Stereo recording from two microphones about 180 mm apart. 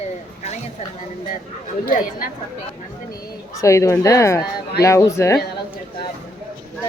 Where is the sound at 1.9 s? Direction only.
50° left (ahead or behind).